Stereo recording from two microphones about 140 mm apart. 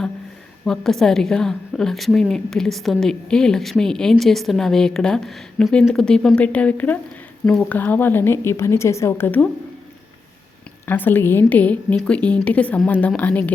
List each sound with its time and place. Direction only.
0.6 s a woman's voice: 5° left (ahead or behind)
10.8 s a woman's voice: 15° left (ahead or behind)